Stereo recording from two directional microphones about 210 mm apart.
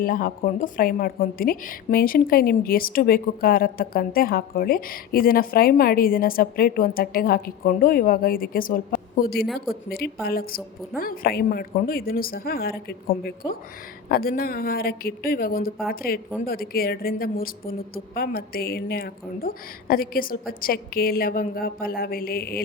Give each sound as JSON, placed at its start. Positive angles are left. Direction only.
{"t": 0.0, "sound": "a woman's voice", "side_deg": 40}